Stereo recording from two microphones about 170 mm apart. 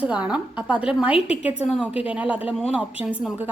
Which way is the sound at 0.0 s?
5° right (ahead or behind).